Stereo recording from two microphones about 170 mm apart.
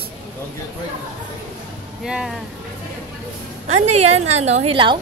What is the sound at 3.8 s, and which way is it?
A woman's voice, 40° right (ahead or behind).